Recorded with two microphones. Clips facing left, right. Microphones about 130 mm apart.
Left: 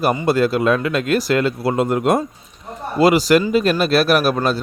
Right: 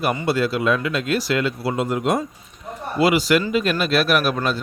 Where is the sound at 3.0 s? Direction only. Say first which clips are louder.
Left 4 dB; 40° left (ahead or behind).